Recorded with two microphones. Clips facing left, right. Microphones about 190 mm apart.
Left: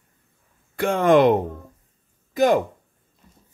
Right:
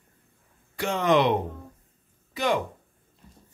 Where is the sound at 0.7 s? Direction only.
50° left (ahead or behind).